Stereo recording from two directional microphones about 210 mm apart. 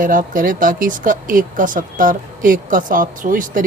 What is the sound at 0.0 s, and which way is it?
Speech, 40° right (ahead or behind).